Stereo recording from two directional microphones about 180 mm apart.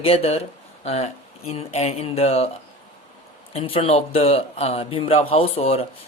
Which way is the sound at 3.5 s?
30° left (ahead or behind).